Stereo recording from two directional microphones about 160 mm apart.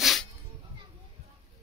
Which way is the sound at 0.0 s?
Centre (ahead or behind).